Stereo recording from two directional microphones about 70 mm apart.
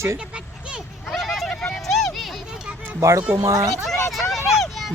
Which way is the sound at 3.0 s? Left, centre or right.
Right.